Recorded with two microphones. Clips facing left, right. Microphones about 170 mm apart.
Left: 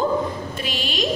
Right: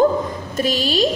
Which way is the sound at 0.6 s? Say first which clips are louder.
Right 8 dB; 40° right (ahead or behind).